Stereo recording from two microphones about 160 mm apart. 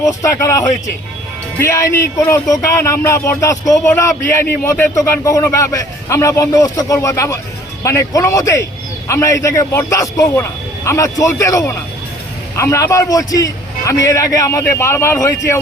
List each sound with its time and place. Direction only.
0.0 s speech: 20° left (ahead or behind)